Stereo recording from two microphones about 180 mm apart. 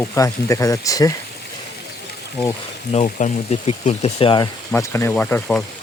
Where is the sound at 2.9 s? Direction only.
40° left (ahead or behind).